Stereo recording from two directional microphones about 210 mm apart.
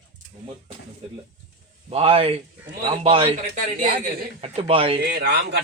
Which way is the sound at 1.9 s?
25° right (ahead or behind).